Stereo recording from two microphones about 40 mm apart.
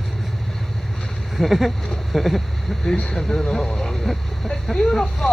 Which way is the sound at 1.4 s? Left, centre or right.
Centre.